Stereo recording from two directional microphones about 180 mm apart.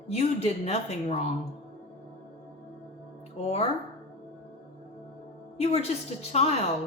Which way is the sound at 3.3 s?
35° left (ahead or behind).